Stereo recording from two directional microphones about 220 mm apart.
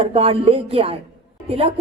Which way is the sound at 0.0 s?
25° right (ahead or behind).